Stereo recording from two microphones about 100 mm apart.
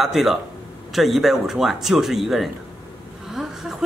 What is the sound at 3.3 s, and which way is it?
Vehicle, 5° right (ahead or behind).